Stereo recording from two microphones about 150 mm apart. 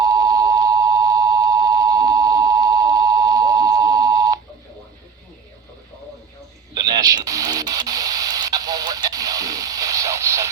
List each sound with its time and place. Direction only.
0.0 s busy signal: 25° right (ahead or behind)
6.7 s radio: 25° right (ahead or behind)